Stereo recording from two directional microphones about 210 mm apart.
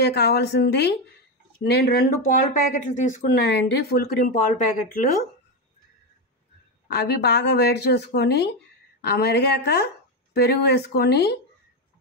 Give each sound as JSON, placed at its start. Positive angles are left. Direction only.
{"t": 0.0, "sound": "speech", "side_deg": 50}
{"t": 6.9, "sound": "speech", "side_deg": 55}